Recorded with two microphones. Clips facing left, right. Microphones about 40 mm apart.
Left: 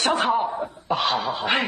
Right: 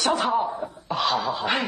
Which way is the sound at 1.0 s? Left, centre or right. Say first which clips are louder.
Right 2 dB; left.